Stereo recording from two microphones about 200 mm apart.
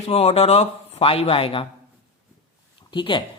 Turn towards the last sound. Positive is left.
turn(degrees=25)  # may be behind; listen again after turning